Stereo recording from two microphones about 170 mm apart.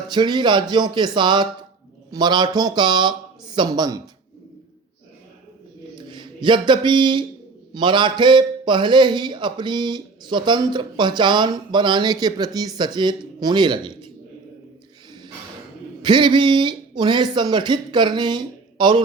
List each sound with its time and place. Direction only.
0.1 s a man's voice: 25° right (ahead or behind)
6.1 s a man's voice: 30° right (ahead or behind)
16.0 s a man's voice: 25° right (ahead or behind)